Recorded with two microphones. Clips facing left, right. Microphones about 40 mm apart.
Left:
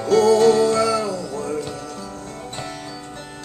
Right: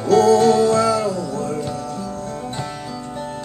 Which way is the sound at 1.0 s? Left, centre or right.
Right.